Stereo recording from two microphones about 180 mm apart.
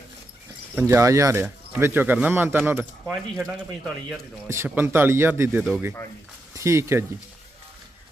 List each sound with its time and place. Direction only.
0.8 s speech: 15° right (ahead or behind)
3.1 s speech: 5° left (ahead or behind)
4.4 s speech: 15° right (ahead or behind)